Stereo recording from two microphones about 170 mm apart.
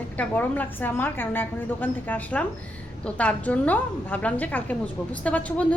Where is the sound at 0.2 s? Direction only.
10° left (ahead or behind).